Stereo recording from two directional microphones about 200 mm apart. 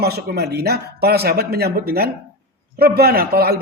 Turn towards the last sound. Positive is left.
turn(degrees=-50)  # may be behind; listen again after turning